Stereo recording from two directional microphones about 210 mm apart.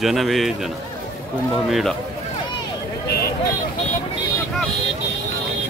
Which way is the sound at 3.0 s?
50° left (ahead or behind).